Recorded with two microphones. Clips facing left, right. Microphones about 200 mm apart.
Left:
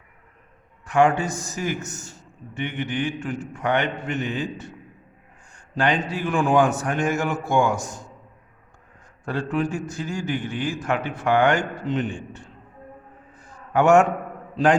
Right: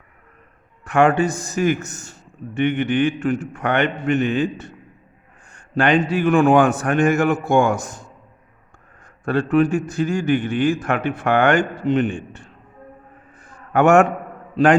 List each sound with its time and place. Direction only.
0.9 s a man's voice: 60° right (ahead or behind)
9.2 s a man's voice: 65° right (ahead or behind)
13.3 s a sound: 60° right (ahead or behind)
14.5 s a man's voice: 60° right (ahead or behind)